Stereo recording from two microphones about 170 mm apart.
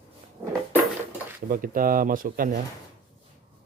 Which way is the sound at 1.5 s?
55° right (ahead or behind).